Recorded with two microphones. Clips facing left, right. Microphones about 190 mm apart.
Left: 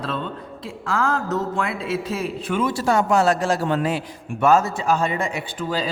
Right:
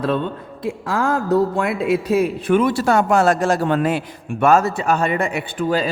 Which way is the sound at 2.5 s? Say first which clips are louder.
Right 4 dB; 65° right (ahead or behind).